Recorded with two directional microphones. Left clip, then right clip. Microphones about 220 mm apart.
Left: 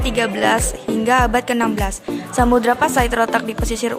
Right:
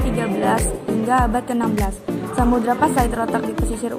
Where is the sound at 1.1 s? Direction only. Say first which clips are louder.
Left 4 dB; 45° left (ahead or behind).